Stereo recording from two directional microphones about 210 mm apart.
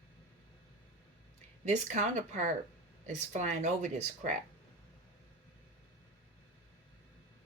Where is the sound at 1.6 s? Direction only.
35° right (ahead or behind).